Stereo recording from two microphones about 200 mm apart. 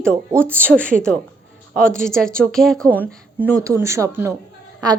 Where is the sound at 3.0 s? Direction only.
10° right (ahead or behind).